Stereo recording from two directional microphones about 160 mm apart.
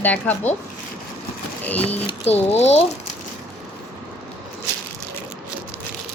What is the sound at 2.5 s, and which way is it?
Speech, 40° left (ahead or behind).